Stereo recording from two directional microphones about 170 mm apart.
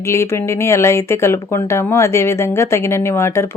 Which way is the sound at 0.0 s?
15° left (ahead or behind).